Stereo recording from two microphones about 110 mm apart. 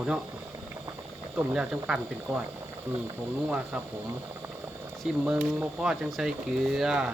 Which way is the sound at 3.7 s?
10° right (ahead or behind).